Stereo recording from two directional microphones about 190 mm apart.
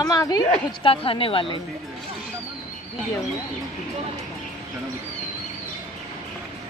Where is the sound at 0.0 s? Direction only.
20° left (ahead or behind).